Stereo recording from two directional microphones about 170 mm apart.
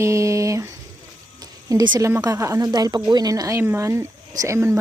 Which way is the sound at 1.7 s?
25° right (ahead or behind).